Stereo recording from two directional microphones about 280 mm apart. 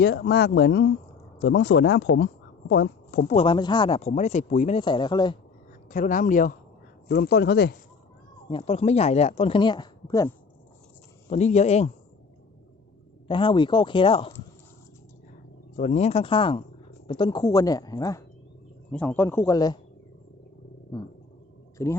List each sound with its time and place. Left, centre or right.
0.0 s speech: left
3.3 s speech: centre
5.9 s speech: left
8.4 s speech: centre
11.3 s speech: left
13.2 s speech: centre
15.7 s speech: left
21.8 s speech: centre